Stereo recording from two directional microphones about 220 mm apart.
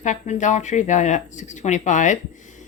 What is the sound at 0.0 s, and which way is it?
A woman's voice, 35° left (ahead or behind).